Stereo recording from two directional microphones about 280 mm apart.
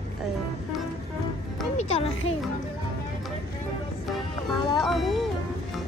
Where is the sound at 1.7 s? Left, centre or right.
Left.